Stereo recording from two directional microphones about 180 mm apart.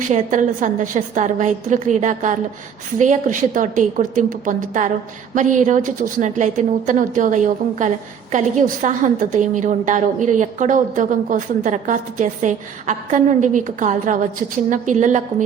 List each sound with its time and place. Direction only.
0.1 s a woman's voice: 45° right (ahead or behind)